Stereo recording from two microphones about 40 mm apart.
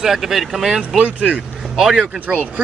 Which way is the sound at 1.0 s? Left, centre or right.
Right.